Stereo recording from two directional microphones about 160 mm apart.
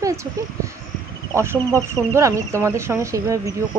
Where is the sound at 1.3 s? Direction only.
20° right (ahead or behind).